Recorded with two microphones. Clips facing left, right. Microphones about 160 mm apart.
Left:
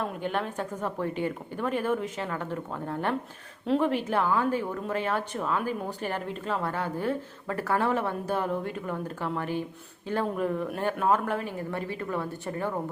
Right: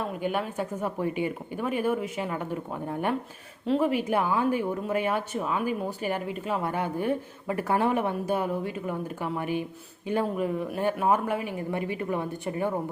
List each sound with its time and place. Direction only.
0.0 s a woman's voice: 10° right (ahead or behind)